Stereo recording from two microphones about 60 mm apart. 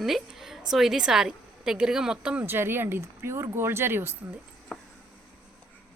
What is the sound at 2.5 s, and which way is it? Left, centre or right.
Speech, right.